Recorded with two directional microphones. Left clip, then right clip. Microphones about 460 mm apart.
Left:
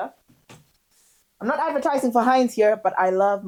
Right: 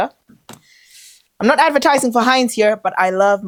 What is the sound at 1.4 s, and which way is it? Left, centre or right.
Speech, right.